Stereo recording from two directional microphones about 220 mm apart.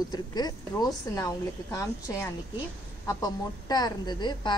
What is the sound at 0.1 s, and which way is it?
A woman's voice, 20° left (ahead or behind).